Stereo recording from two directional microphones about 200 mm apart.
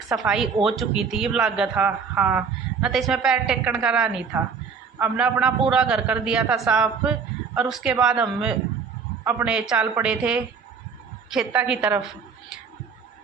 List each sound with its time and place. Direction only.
0.1 s a woman's voice: centre (ahead or behind)